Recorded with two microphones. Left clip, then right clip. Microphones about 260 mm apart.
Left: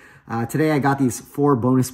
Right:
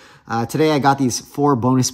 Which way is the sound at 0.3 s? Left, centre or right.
Centre.